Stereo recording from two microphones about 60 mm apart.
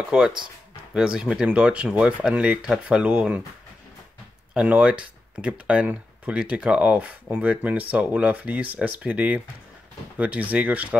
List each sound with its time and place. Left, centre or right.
0.1 s speech: centre
4.6 s speech: right